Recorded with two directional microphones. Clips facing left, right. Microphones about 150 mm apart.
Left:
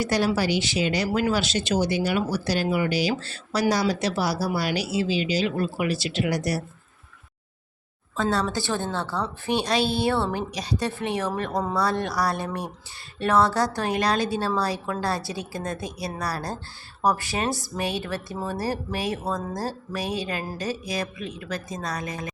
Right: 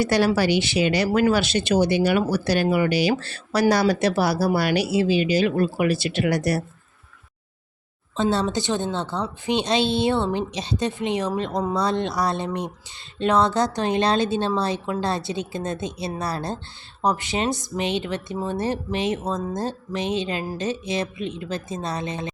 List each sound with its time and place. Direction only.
0.0 s a woman's voice: 65° right (ahead or behind)
8.1 s a woman's voice: 25° right (ahead or behind)